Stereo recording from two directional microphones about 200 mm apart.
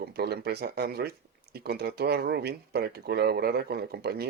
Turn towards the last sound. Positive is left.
turn(degrees=-50)  # may be behind; listen again after turning